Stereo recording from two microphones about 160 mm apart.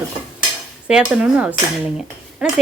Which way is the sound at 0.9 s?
5° right (ahead or behind).